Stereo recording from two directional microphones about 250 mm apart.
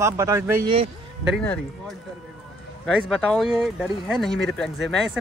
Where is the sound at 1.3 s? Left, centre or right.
Centre.